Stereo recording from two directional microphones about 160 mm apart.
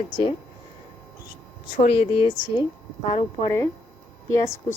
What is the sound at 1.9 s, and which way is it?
Speech, 35° left (ahead or behind).